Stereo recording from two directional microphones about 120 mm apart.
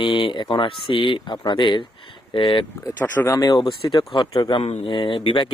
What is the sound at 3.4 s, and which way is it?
Speech, 35° left (ahead or behind).